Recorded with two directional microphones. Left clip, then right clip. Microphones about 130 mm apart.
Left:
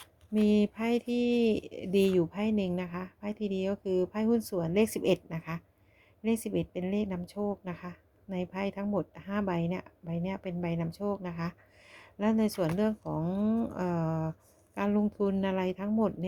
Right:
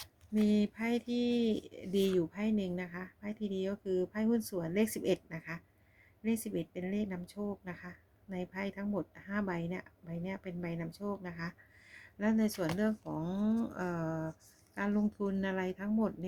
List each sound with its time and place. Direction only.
0.4 s a woman's voice: 45° left (ahead or behind)